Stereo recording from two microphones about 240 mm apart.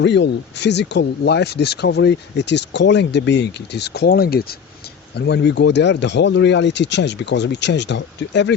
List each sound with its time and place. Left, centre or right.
0.0 s speech: left